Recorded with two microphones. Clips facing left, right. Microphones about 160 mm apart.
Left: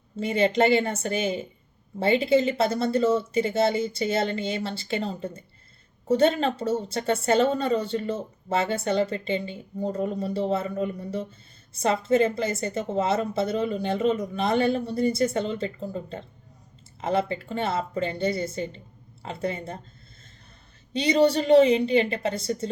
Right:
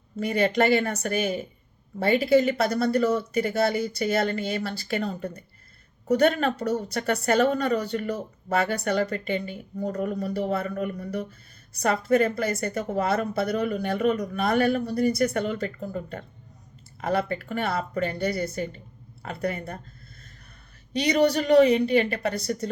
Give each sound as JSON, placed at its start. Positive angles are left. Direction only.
{"t": 0.2, "sound": "speech", "side_deg": 25}
{"t": 20.9, "sound": "speech", "side_deg": 25}